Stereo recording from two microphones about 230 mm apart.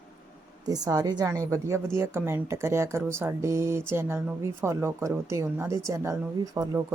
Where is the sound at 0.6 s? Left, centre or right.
Centre.